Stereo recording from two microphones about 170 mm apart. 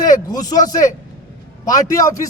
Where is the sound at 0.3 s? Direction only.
20° left (ahead or behind).